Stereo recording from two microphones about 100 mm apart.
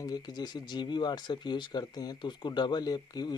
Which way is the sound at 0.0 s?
40° left (ahead or behind).